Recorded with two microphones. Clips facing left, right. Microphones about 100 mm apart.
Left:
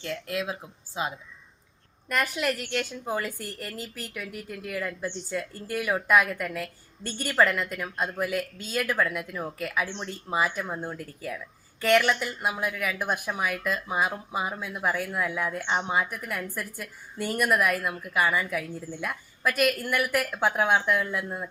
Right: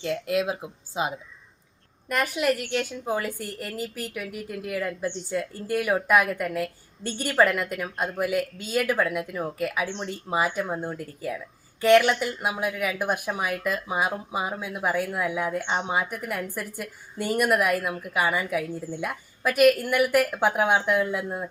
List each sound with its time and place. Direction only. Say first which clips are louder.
0.0 s speech: right 6 dB; 20° right (ahead or behind)
2.3 s speech: right 4 dB; 5° right (ahead or behind)